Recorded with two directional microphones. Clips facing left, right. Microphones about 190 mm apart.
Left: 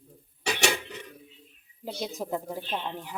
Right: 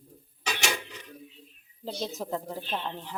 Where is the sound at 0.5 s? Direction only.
65° left (ahead or behind).